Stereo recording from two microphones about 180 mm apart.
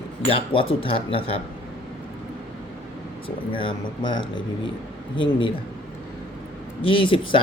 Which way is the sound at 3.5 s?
25° left (ahead or behind).